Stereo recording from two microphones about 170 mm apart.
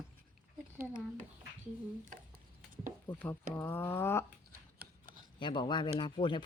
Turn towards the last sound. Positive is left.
turn(degrees=30)  # may be behind; listen again after turning